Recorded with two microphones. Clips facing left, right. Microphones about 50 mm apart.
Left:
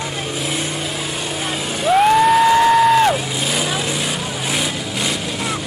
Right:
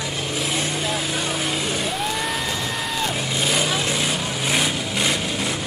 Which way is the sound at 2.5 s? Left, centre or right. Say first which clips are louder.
Left 15 dB; left.